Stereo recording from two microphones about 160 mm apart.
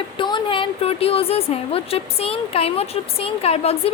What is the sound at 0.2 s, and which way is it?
A woman's voice, 30° left (ahead or behind).